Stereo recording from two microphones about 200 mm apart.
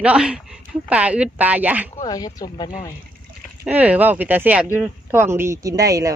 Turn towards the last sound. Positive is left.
turn(degrees=-15)  # may be behind; listen again after turning